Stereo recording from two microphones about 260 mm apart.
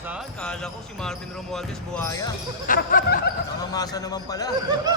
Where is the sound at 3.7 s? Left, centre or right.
Centre.